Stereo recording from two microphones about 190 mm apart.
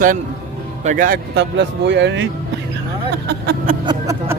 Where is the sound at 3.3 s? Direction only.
60° right (ahead or behind).